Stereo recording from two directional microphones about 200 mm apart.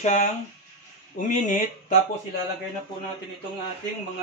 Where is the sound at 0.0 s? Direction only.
35° left (ahead or behind).